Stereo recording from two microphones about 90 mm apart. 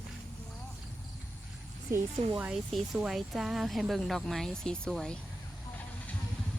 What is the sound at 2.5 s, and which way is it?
Speech, centre (ahead or behind).